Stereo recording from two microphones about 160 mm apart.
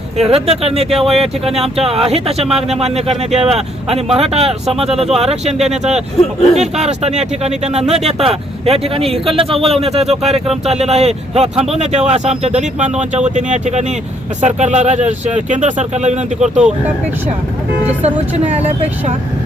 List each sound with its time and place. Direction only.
0.2 s speech: 40° right (ahead or behind)
0.9 s speech: centre (ahead or behind)
1.2 s speech: 40° right (ahead or behind)
16.6 s speech: 5° right (ahead or behind)